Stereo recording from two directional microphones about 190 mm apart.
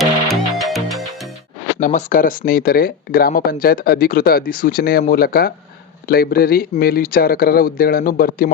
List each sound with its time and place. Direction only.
0.0 s music: centre (ahead or behind)
1.8 s speech: 40° left (ahead or behind)